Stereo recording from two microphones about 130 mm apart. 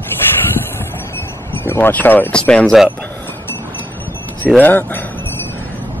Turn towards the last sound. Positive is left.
turn(degrees=15)  # may be behind; listen again after turning